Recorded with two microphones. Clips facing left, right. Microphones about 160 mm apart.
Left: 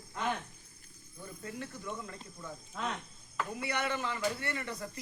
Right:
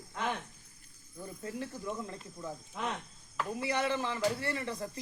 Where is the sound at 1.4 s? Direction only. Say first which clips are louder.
Right 3 dB; 30° right (ahead or behind).